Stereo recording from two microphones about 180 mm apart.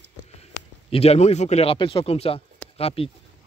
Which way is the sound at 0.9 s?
35° left (ahead or behind).